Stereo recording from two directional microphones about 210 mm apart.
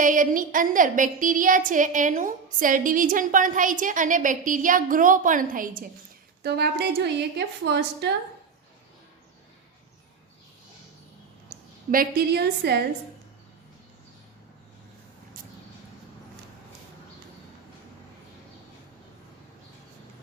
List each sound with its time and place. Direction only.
0.0 s a woman's voice: 40° right (ahead or behind); by 8.1 s 55° right (ahead or behind)
11.4 s a woman's voice: 45° right (ahead or behind)